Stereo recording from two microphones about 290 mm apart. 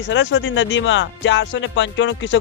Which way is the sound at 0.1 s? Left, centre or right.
Left.